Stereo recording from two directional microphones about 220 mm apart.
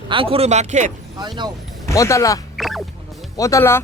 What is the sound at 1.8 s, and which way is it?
Speech, 15° left (ahead or behind).